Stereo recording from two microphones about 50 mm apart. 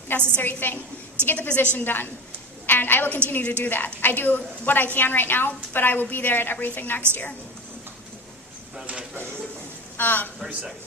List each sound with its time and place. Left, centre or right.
0.1 s a woman's voice: left
1.8 s a woman's voice: left
10.0 s a woman's voice: left